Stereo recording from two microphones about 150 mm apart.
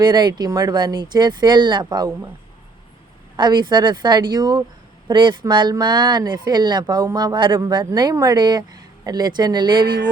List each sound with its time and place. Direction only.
0.0 s speech: 30° right (ahead or behind)
3.3 s speech: 30° right (ahead or behind)